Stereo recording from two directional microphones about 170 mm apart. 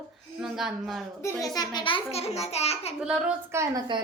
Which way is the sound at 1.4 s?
20° left (ahead or behind).